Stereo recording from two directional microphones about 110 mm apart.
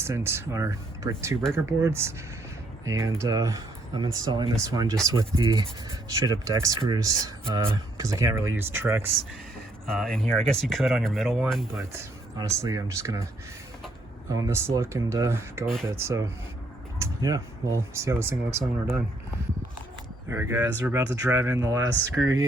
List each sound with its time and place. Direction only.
0.0 s speech: 25° right (ahead or behind); by 4.5 s 45° right (ahead or behind)
4.6 s speech: 30° right (ahead or behind)
9.8 s speech: 5° left (ahead or behind)
12.5 s speech: 25° right (ahead or behind)
14.3 s speech: 30° right (ahead or behind)
20.3 s speech: 20° right (ahead or behind)